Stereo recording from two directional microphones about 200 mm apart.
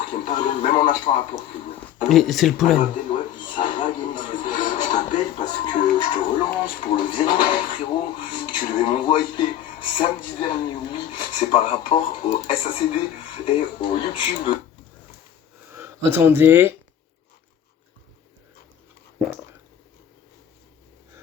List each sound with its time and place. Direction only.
0.3 s music: 25° left (ahead or behind)
2.0 s speech: centre (ahead or behind)
3.1 s music: 25° left (ahead or behind)
4.2 s television: 25° left (ahead or behind)
6.0 s speech: 20° left (ahead or behind)
15.7 s speech: 10° right (ahead or behind)